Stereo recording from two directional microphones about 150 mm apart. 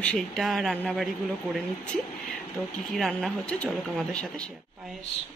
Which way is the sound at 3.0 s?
Centre (ahead or behind).